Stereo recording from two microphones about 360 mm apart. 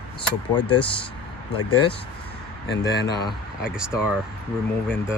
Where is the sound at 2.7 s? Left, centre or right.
Left.